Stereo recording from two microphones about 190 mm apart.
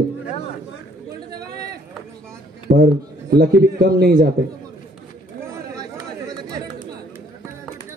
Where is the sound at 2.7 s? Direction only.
50° right (ahead or behind).